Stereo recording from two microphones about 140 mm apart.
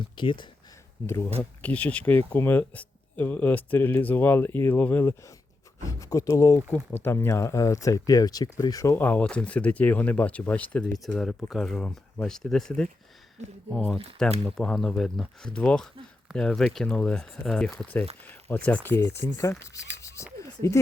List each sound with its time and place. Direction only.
0.2 s speech: 35° left (ahead or behind)
1.0 s speech: 20° left (ahead or behind)
20.4 s a sound: 25° left (ahead or behind)